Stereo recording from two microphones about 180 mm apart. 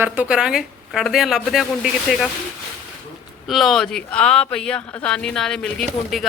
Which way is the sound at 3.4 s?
Centre (ahead or behind).